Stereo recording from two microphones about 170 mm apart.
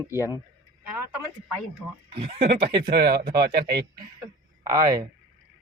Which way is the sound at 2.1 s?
35° right (ahead or behind).